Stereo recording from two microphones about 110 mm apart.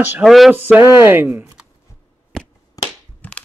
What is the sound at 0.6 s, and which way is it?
Speech, 15° right (ahead or behind).